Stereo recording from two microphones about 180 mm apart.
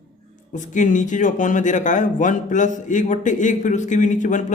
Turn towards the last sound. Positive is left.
turn(degrees=45)  # may be behind; listen again after turning